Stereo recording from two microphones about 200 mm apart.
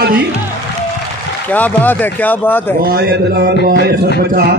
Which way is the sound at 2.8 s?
50° right (ahead or behind).